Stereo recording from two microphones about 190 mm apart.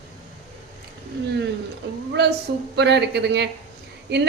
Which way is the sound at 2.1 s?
65° right (ahead or behind).